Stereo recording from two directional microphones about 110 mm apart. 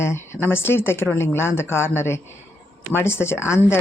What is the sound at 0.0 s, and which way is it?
Speech, 25° left (ahead or behind).